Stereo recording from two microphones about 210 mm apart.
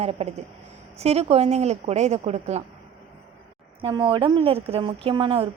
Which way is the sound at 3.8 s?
25° right (ahead or behind).